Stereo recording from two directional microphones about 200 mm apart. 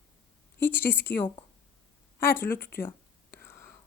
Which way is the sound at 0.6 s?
10° left (ahead or behind).